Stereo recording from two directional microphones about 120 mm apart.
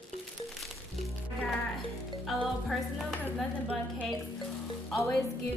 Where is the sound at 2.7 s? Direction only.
5° left (ahead or behind).